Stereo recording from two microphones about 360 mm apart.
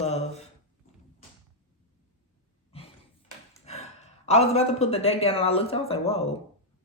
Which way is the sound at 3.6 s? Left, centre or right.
Centre.